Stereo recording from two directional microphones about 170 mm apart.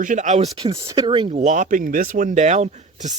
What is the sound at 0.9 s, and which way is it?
Speech, 25° right (ahead or behind).